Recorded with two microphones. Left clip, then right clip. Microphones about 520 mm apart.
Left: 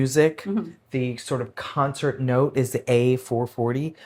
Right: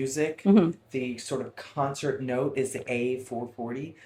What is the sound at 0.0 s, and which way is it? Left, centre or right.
Speech, left.